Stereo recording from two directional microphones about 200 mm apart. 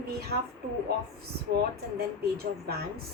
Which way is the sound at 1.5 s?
50° right (ahead or behind).